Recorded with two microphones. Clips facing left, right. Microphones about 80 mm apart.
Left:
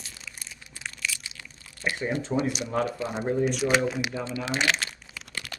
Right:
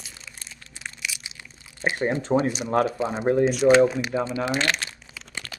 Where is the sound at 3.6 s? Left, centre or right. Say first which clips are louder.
Right 8 dB; right.